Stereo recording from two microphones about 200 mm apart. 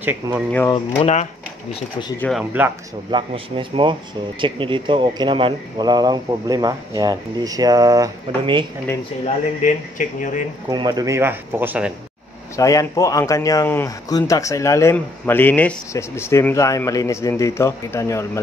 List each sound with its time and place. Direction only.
0.0 s speech: 10° right (ahead or behind)
0.5 s speech: 10° left (ahead or behind)
1.7 s speech: 20° left (ahead or behind)
2.1 s speech: 5° left (ahead or behind)
3.1 s speech: 25° right (ahead or behind)
9.6 s speech: 40° left (ahead or behind)
10.7 s speech: 20° right (ahead or behind)
12.5 s speech: 15° left (ahead or behind)